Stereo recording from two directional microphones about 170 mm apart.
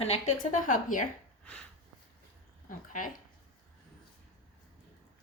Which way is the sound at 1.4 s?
5° left (ahead or behind).